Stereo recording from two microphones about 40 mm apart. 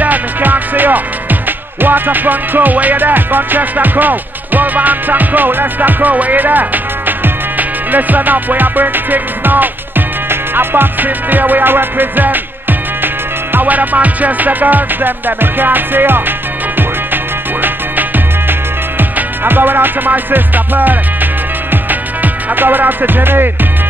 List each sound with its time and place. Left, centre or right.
0.0 s music: right